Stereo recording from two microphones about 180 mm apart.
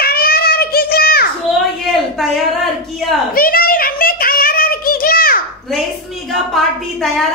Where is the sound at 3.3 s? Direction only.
55° left (ahead or behind).